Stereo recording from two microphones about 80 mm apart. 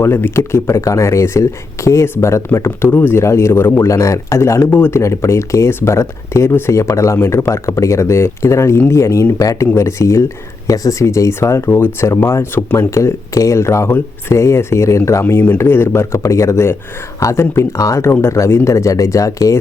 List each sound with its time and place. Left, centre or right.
0.0 s speech: left